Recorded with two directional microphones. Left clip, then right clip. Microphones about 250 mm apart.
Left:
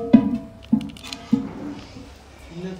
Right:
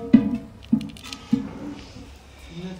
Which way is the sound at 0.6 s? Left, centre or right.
Centre.